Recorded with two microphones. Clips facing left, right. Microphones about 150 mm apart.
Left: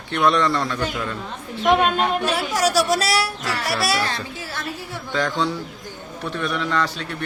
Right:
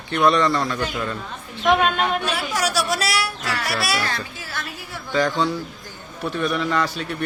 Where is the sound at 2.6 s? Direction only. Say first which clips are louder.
Left 5 dB; 40° left (ahead or behind).